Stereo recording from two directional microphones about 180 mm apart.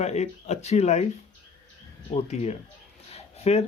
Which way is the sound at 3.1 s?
35° left (ahead or behind).